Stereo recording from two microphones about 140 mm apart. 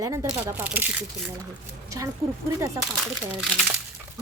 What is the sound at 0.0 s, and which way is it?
A woman's voice, 20° right (ahead or behind).